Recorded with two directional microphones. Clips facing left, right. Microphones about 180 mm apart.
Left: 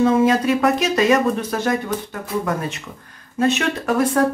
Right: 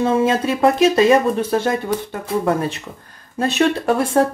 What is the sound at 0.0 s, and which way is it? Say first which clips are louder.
Speech: left 1 dB; 30° right (ahead or behind).